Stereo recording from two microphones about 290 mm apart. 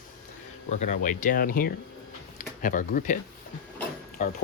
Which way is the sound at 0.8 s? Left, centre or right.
Left.